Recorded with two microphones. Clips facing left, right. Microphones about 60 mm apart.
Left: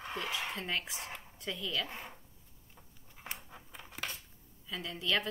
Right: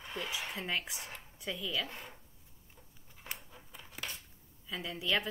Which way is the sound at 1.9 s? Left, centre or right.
Left.